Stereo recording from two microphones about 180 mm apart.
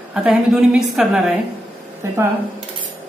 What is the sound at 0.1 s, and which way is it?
Speech, centre (ahead or behind).